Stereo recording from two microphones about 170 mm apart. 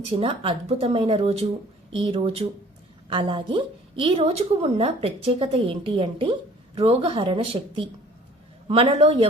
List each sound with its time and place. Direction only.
0.0 s a woman's voice: 35° right (ahead or behind)